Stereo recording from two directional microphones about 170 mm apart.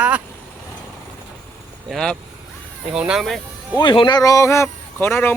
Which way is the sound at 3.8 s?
25° left (ahead or behind).